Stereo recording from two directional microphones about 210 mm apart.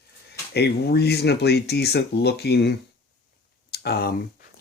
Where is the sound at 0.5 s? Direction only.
50° left (ahead or behind).